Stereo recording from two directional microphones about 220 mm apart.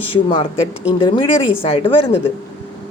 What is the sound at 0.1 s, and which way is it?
Speech, 20° left (ahead or behind).